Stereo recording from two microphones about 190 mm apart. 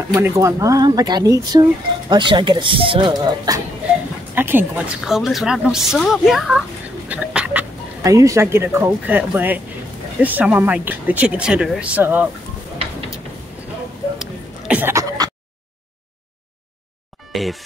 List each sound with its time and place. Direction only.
0.1 s a woman's voice: 15° right (ahead or behind)
14.1 s a sound: 5° right (ahead or behind)
17.3 s speech: centre (ahead or behind)